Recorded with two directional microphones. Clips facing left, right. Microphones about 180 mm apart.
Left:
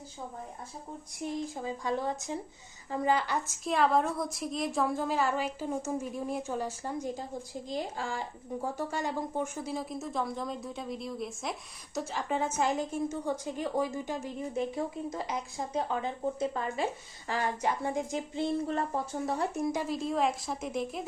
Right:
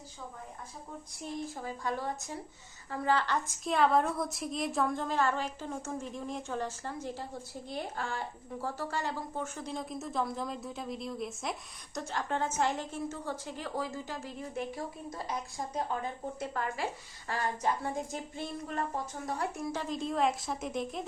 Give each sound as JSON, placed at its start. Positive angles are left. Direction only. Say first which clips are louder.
{"t": 1.2, "sound": "a woman's voice", "louder": "left 4 dB", "side_deg": 20}
{"t": 3.6, "sound": "a woman's voice", "louder": "even", "side_deg": 0}
{"t": 19.7, "sound": "speech", "louder": "left 2 dB", "side_deg": 5}